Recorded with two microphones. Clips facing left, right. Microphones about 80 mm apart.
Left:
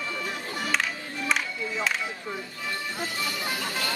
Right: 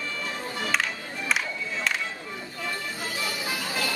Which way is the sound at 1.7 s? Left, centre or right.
Centre.